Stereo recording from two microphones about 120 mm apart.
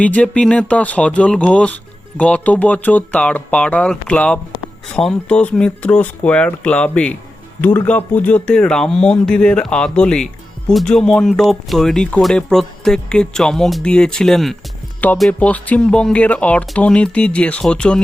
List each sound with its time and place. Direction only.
0.0 s speech: 10° left (ahead or behind)